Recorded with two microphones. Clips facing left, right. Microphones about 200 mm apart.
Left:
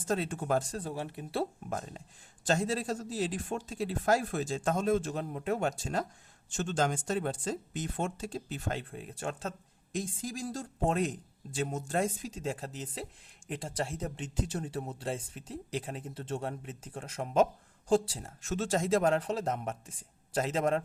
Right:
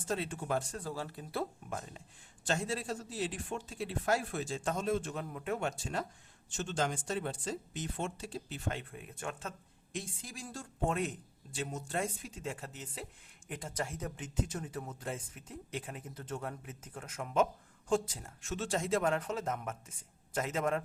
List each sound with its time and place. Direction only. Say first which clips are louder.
0.1 s speech: left 4 dB; 45° left (ahead or behind)
0.9 s speech: left 3 dB; 20° left (ahead or behind)
2.5 s speech: left 5 dB; 40° left (ahead or behind)
11.5 s speech: left 5 dB; 50° left (ahead or behind); by 20.8 s 30° left (ahead or behind)